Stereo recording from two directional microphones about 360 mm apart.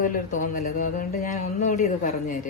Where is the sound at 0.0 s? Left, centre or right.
Left.